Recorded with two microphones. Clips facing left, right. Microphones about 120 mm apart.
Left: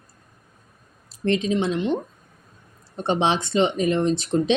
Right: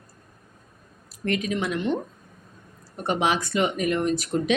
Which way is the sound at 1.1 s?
25° left (ahead or behind).